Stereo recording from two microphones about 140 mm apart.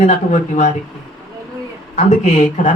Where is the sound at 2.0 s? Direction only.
55° left (ahead or behind).